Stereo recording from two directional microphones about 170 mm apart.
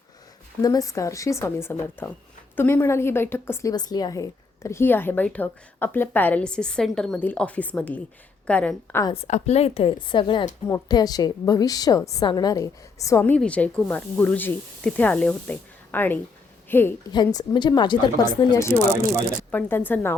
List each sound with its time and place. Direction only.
0.6 s a woman's voice: 20° left (ahead or behind)
9.2 s a woman's voice: 40° left (ahead or behind); by 16.9 s 10° left (ahead or behind)
17.1 s speech: 25° left (ahead or behind)
19.5 s a woman's voice: 10° left (ahead or behind)